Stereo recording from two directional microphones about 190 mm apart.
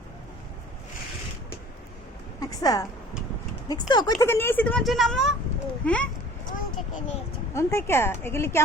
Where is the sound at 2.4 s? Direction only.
20° left (ahead or behind).